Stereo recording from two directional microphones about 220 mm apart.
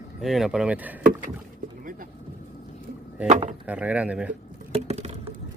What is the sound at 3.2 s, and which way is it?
Speech, 30° right (ahead or behind).